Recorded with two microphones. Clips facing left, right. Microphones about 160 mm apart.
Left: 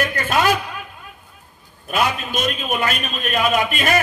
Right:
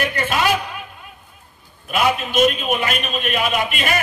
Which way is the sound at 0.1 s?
45° left (ahead or behind).